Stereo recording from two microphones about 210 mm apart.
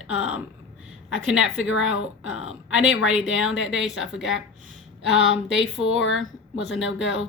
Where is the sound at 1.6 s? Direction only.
65° left (ahead or behind).